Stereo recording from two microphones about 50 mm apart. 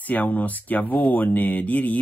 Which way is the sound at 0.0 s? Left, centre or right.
Left.